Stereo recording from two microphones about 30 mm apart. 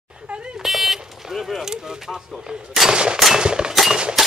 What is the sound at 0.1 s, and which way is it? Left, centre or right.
Vehicle, right.